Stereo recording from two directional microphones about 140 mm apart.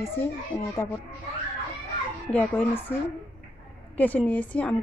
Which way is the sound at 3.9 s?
10° left (ahead or behind).